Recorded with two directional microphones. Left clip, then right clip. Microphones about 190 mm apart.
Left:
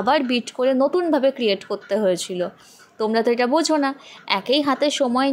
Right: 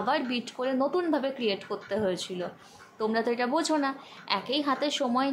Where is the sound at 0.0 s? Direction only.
35° left (ahead or behind).